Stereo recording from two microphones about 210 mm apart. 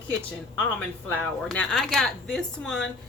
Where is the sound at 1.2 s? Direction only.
5° left (ahead or behind).